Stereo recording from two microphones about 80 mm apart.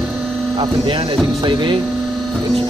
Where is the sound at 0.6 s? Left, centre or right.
Right.